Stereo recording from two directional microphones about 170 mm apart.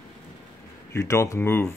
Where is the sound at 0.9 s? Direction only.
20° left (ahead or behind).